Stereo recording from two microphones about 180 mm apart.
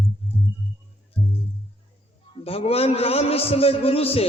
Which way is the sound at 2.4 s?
35° left (ahead or behind).